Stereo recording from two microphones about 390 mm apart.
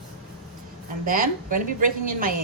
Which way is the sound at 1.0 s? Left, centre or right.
Right.